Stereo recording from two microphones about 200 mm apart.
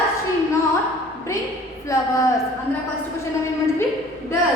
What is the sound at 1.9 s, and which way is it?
Speech, 15° left (ahead or behind).